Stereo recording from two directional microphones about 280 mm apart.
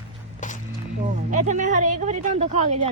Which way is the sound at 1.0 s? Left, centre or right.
Right.